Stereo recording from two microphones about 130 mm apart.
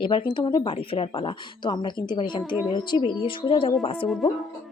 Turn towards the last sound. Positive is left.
turn(degrees=45)  # may be behind; listen again after turning